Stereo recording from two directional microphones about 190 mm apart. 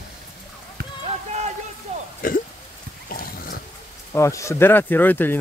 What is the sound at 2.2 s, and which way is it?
Speech, 50° left (ahead or behind).